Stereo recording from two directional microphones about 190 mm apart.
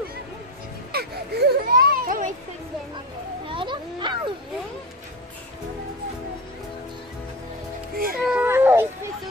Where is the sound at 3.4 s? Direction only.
25° right (ahead or behind).